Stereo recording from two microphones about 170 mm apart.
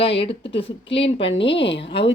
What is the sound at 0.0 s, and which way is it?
Speech, 35° left (ahead or behind).